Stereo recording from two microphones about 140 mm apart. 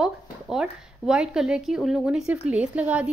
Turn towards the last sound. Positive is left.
turn(degrees=-10)  # may be behind; listen again after turning